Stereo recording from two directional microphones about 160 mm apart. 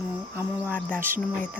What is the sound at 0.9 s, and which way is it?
Speech, 60° right (ahead or behind).